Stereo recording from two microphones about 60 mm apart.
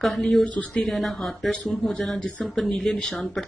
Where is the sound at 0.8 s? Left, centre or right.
Centre.